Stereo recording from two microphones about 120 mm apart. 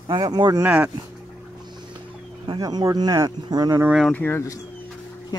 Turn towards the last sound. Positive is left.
turn(degrees=25)  # may be behind; listen again after turning